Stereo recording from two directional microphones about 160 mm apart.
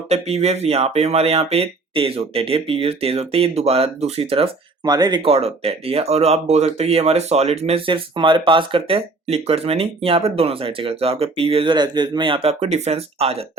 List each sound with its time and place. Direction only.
0.1 s speech: 40° right (ahead or behind)
4.8 s speech: 25° right (ahead or behind); by 13.4 s 40° right (ahead or behind)